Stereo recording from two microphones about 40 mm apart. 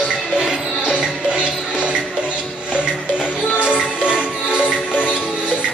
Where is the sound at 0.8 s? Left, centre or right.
Right.